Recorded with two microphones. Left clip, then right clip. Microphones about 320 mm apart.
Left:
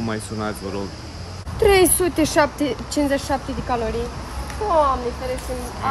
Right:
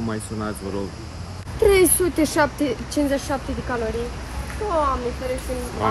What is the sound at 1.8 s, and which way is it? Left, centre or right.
Speech, left.